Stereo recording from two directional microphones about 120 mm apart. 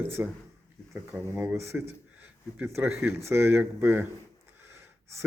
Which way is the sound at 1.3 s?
20° right (ahead or behind).